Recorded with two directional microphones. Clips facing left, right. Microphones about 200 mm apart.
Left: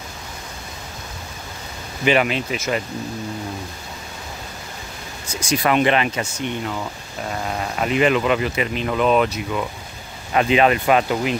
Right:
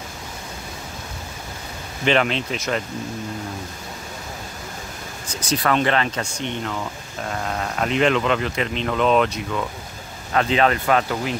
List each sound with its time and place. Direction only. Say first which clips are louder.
2.0 s speech: left 1 dB; 10° left (ahead or behind)
5.3 s speech: left 2 dB; 10° left (ahead or behind)